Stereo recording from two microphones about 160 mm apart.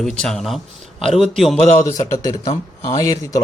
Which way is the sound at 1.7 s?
15° left (ahead or behind).